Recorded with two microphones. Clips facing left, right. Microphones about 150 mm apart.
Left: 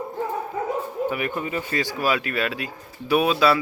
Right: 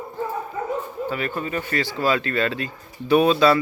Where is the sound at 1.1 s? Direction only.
15° left (ahead or behind).